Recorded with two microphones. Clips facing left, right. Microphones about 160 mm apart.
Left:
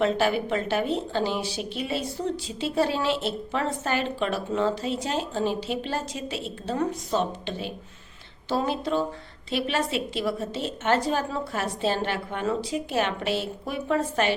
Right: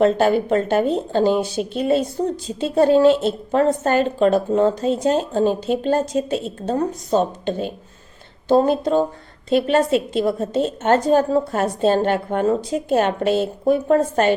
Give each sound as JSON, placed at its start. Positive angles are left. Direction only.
{"t": 0.0, "sound": "a woman's voice", "side_deg": -45}